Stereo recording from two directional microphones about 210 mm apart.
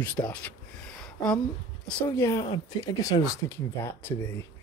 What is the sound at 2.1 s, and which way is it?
Speech, 15° left (ahead or behind).